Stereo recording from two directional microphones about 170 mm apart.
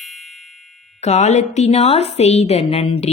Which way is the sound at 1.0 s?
40° left (ahead or behind).